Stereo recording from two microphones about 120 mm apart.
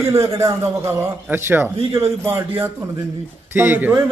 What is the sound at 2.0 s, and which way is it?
Speech, 50° right (ahead or behind).